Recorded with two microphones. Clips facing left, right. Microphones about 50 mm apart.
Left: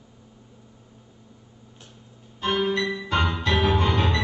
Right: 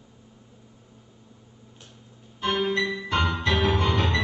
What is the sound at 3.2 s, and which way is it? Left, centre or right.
Music, centre.